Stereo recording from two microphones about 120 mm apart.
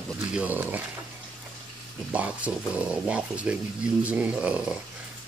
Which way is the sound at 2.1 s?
10° right (ahead or behind).